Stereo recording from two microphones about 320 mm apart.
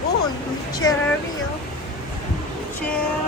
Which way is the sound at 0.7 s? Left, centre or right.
Centre.